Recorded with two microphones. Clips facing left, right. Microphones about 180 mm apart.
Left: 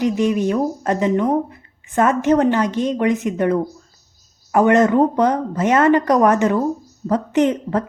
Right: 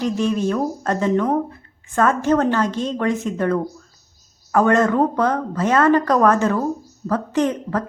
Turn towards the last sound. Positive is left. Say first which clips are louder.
# left 3 dB
turn(degrees=20)  # may be behind; listen again after turning